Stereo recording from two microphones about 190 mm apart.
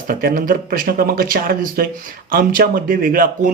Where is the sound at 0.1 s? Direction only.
50° right (ahead or behind).